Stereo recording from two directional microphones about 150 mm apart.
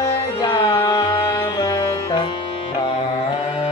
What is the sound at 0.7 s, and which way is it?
Music, 25° left (ahead or behind).